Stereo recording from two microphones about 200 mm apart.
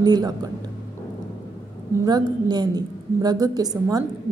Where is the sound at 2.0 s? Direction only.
20° right (ahead or behind).